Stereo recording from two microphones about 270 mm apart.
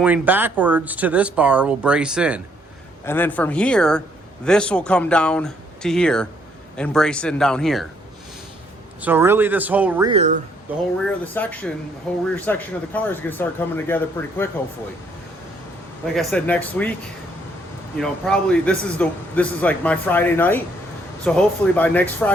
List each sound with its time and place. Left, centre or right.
0.0 s a man's voice: centre
3.0 s a man's voice: centre
9.0 s speech: centre
10.1 s speech: right
10.7 s speech: centre
11.0 s a man's voice: centre
16.1 s a man's voice: centre
17.9 s a man's voice: centre